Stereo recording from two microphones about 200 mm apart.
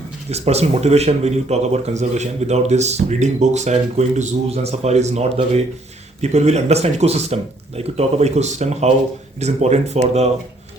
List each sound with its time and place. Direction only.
0.3 s speech: 30° right (ahead or behind)